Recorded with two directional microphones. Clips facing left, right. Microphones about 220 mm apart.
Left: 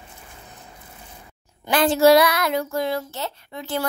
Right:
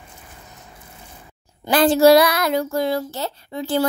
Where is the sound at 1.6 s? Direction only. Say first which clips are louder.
Right 3 dB; 35° right (ahead or behind).